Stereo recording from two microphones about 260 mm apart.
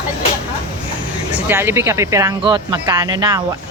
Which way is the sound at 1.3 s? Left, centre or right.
Centre.